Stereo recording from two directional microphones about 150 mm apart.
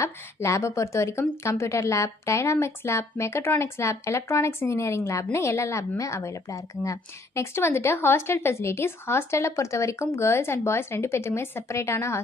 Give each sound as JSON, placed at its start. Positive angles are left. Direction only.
{"t": 0.0, "sound": "a woman's voice", "side_deg": 20}